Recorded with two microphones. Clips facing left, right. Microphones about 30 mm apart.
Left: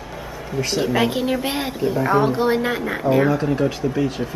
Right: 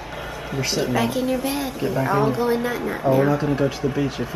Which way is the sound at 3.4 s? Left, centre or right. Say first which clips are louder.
Left 1 dB; centre.